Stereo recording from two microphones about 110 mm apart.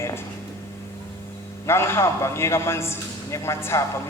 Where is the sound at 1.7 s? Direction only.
25° left (ahead or behind).